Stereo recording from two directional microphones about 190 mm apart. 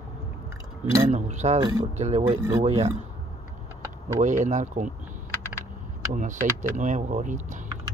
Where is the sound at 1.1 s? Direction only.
35° right (ahead or behind).